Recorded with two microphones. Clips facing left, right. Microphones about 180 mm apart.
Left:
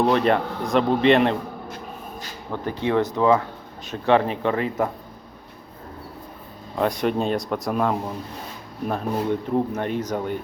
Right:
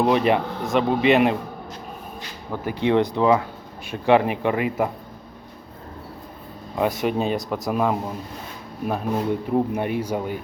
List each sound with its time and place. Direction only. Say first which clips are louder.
0.0 s speech: even; 5° right (ahead or behind)
2.5 s speech: right 2 dB; 15° right (ahead or behind)
6.7 s speech: even; 5° right (ahead or behind)